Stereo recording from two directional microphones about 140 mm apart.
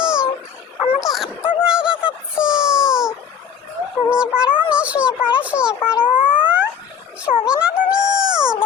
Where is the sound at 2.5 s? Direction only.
5° right (ahead or behind).